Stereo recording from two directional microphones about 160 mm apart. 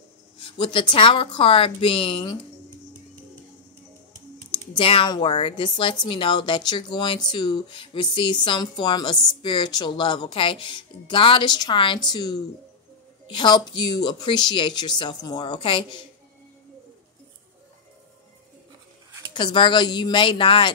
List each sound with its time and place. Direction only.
0.4 s speech: 30° left (ahead or behind)
4.5 s speech: 35° left (ahead or behind)
19.3 s speech: 30° left (ahead or behind)